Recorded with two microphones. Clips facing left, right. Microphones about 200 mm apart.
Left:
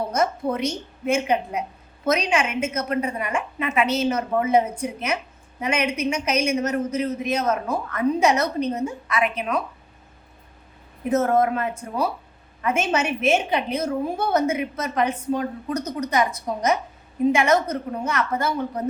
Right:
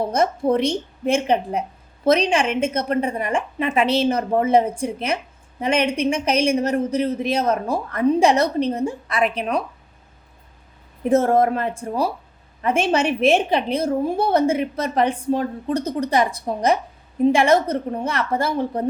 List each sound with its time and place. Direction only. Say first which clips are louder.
0.1 s a woman's voice: right 4 dB; 30° right (ahead or behind)
11.1 s a woman's voice: right 3 dB; 30° right (ahead or behind)